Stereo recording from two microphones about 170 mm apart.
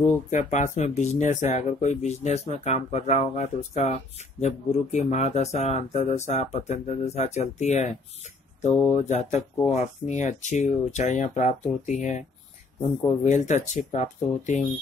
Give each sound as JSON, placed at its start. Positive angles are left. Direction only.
{"t": 0.3, "sound": "speech", "side_deg": 45}
{"t": 8.9, "sound": "speech", "side_deg": 40}